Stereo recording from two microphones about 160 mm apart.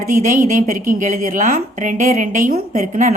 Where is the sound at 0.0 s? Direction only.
50° right (ahead or behind).